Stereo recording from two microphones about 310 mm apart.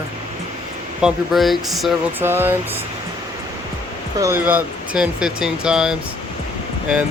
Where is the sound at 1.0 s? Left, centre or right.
Centre.